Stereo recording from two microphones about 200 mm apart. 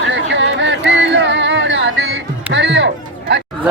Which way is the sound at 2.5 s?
65° right (ahead or behind).